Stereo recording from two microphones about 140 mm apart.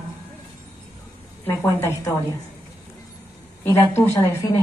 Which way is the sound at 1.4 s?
15° left (ahead or behind).